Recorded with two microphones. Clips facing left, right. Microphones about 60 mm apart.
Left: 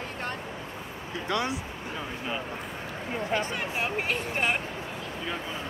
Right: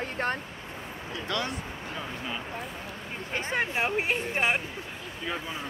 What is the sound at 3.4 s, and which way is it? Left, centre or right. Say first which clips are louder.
Speech: right 2 dB; right.